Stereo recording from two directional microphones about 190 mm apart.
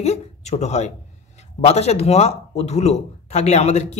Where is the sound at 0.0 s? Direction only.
35° left (ahead or behind).